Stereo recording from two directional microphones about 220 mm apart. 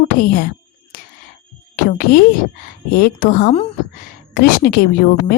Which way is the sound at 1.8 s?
40° left (ahead or behind).